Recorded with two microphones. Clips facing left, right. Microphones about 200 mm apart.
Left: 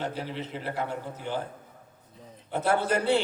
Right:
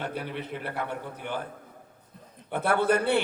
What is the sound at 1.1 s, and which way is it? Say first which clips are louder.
Speech: left 1 dB; 60° right (ahead or behind).